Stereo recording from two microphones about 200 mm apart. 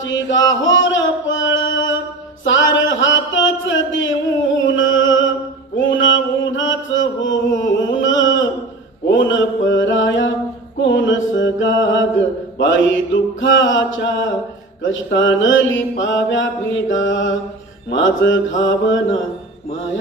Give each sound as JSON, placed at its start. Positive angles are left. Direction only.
{"t": 0.0, "sound": "music", "side_deg": 70}
{"t": 2.4, "sound": "a sound", "side_deg": 70}
{"t": 4.6, "sound": "music", "side_deg": 70}
{"t": 5.7, "sound": "chant", "side_deg": 70}
{"t": 9.0, "sound": "mantra", "side_deg": 70}